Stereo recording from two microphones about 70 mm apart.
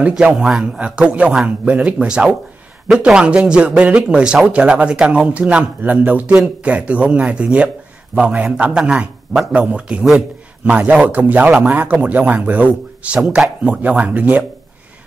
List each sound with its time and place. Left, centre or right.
0.1 s a man's voice: centre
13.2 s speech: centre
13.7 s a man's voice: centre